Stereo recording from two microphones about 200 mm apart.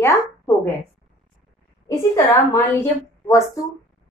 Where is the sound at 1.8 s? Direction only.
15° left (ahead or behind).